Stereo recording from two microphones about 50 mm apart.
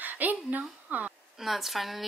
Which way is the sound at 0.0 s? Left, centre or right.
Right.